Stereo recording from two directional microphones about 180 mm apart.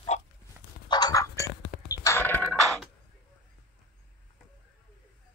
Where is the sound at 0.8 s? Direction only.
25° left (ahead or behind).